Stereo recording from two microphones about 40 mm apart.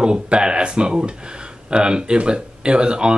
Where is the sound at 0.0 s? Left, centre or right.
Right.